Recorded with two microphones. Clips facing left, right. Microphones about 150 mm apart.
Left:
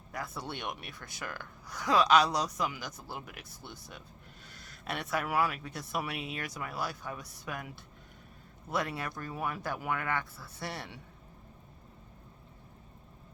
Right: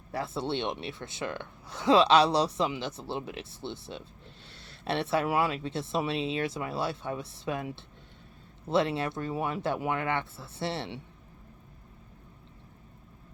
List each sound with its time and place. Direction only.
0.1 s speech: 30° right (ahead or behind)